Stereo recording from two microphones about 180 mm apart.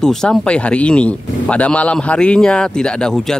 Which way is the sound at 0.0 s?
5° left (ahead or behind).